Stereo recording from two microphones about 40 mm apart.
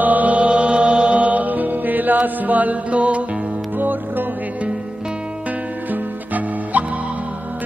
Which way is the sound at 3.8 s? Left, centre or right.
Right.